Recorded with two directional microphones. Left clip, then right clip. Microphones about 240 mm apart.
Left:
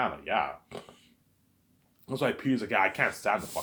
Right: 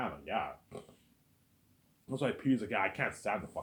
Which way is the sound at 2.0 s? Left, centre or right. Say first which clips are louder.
Left 5 dB; left.